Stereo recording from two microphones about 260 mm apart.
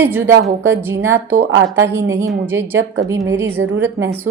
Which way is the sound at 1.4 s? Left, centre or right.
Right.